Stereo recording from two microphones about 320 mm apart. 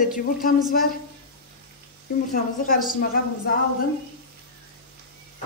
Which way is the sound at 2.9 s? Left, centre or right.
Left.